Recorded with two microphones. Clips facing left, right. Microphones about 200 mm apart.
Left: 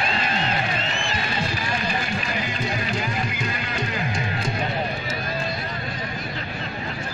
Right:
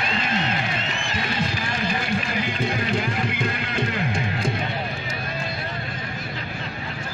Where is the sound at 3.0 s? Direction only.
60° right (ahead or behind).